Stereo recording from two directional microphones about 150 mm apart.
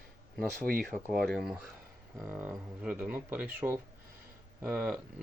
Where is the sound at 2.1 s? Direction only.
15° right (ahead or behind).